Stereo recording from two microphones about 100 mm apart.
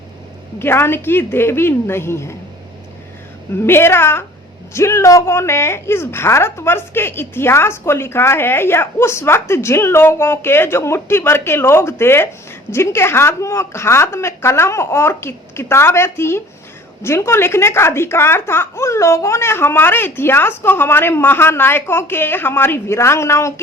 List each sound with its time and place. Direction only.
0.6 s a woman's voice: 25° left (ahead or behind)
3.5 s a woman's voice: 25° left (ahead or behind)